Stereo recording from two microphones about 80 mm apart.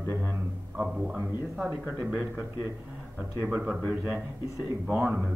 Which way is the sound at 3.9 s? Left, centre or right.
Centre.